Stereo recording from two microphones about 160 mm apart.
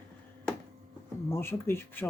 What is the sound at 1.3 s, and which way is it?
Speech, 15° left (ahead or behind).